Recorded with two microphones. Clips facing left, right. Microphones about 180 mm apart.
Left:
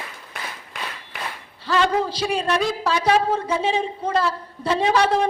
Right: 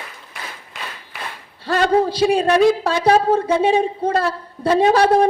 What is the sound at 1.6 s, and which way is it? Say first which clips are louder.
A man's voice: right 4 dB; 55° right (ahead or behind).